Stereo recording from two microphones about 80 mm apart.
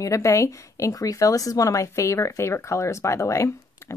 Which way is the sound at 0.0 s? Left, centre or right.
Left.